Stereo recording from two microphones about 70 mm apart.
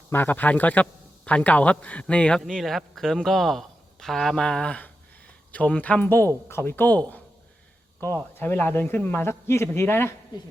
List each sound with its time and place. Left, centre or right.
0.1 s a man's voice: left
2.4 s a man's voice: centre; by 7.0 s left
8.0 s a man's voice: left